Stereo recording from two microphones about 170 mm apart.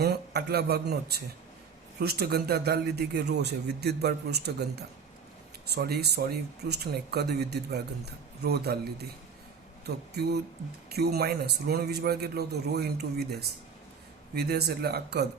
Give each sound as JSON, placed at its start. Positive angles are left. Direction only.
{"t": 0.0, "sound": "speech", "side_deg": -70}
{"t": 10.9, "sound": "speech", "side_deg": -70}